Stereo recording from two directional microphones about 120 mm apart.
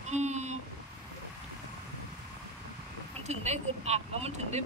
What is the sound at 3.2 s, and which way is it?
Speech, 70° right (ahead or behind).